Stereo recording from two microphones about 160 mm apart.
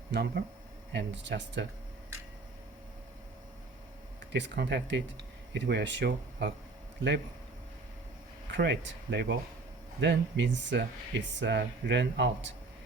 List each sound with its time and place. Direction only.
0.1 s speech: 90° right
4.3 s speech: 90° right
8.5 s speech: 90° right